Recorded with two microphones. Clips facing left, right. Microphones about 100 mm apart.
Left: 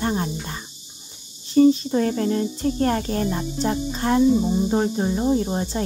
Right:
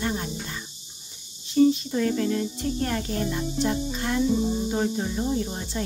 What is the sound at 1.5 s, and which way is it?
Speech, 40° left (ahead or behind).